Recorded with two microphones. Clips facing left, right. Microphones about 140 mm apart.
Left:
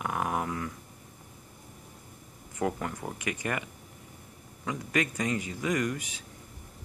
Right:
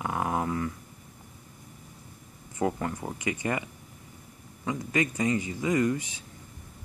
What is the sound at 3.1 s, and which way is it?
Speech, 75° left (ahead or behind).